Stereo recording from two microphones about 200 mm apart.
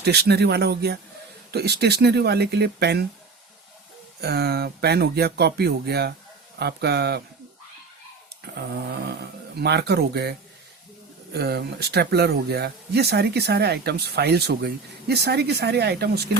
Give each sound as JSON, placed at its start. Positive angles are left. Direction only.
{"t": 0.0, "sound": "speech", "side_deg": -55}
{"t": 4.2, "sound": "speech", "side_deg": -55}
{"t": 9.6, "sound": "speech", "side_deg": -55}
{"t": 11.3, "sound": "speech", "side_deg": -55}